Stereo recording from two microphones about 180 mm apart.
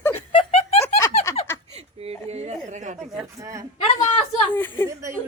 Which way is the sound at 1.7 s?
35° right (ahead or behind).